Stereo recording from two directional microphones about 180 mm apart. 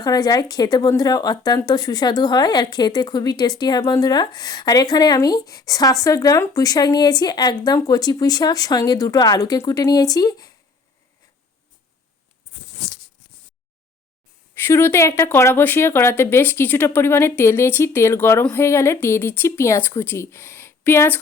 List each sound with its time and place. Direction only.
0.0 s speech: 20° left (ahead or behind)
14.5 s speech: 10° left (ahead or behind)